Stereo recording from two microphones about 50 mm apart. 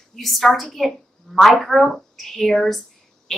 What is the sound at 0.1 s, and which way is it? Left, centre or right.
A woman's voice, centre.